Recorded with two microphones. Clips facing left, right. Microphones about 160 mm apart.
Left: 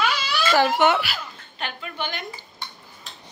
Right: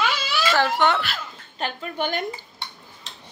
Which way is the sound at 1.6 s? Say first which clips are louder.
Right 4 dB; 45° right (ahead or behind).